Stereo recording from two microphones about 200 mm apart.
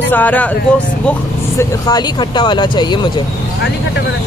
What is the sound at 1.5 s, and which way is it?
Speech, 20° left (ahead or behind).